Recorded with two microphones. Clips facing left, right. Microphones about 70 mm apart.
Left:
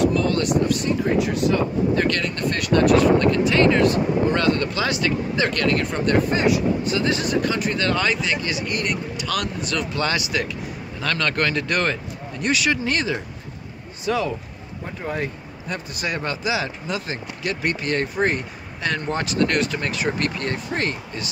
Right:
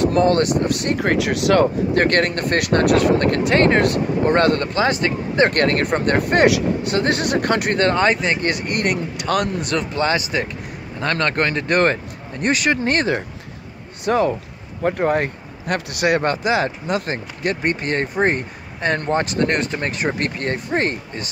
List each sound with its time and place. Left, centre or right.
0.0 s speech: right
2.0 s speech: right
6.2 s speech: right
6.9 s speech: right
7.8 s speech: right
9.8 s speech: right
14.8 s speech: right
15.6 s speech: right
16.2 s speech: right